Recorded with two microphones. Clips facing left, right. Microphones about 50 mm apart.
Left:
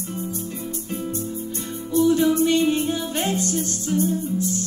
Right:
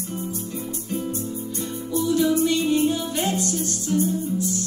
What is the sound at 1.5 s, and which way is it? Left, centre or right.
Music, left.